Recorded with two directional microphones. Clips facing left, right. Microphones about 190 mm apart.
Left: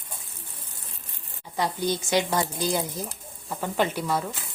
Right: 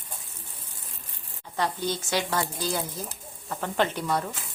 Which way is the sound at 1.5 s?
15° left (ahead or behind).